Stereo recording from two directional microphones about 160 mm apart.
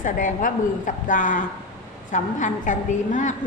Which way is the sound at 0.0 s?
55° left (ahead or behind).